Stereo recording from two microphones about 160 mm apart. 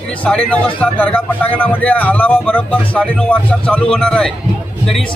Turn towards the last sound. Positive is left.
turn(degrees=5)  # may be behind; listen again after turning